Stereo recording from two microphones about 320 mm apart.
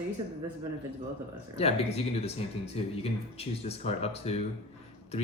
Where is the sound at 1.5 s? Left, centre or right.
Centre.